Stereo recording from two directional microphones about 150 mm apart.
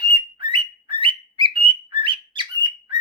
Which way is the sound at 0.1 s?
30° right (ahead or behind).